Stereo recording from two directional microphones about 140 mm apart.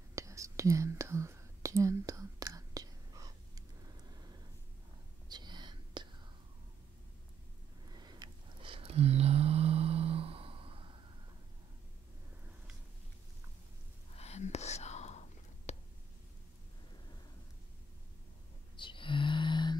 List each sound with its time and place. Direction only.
0.1 s whispering: 20° right (ahead or behind)
5.3 s whispering: 30° right (ahead or behind)
7.9 s mantra: 30° right (ahead or behind)
14.1 s whispering: 50° left (ahead or behind)
18.8 s a sound: 35° left (ahead or behind)